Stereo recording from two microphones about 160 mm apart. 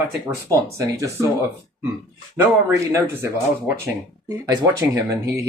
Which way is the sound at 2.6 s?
20° right (ahead or behind).